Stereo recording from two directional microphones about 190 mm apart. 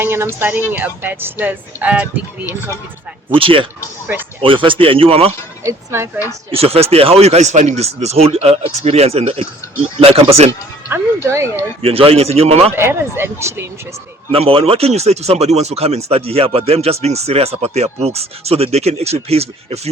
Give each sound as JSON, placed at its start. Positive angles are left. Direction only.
{"t": 0.0, "sound": "speech", "side_deg": -10}
{"t": 3.2, "sound": "speech", "side_deg": -30}
{"t": 5.6, "sound": "speech", "side_deg": -15}
{"t": 6.5, "sound": "speech", "side_deg": -30}
{"t": 10.8, "sound": "speech", "side_deg": -10}
{"t": 11.8, "sound": "speech", "side_deg": -30}
{"t": 12.7, "sound": "speech", "side_deg": -10}
{"t": 14.3, "sound": "speech", "side_deg": -30}